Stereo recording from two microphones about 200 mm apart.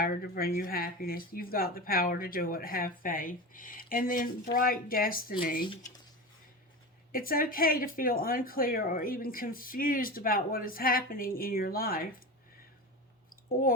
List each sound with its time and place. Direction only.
0.0 s speech: 45° left (ahead or behind)
7.1 s speech: 45° left (ahead or behind)
13.3 s a sound: 45° left (ahead or behind)